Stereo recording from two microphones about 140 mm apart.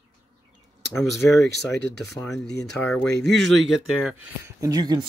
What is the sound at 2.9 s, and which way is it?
Speech, 5° left (ahead or behind).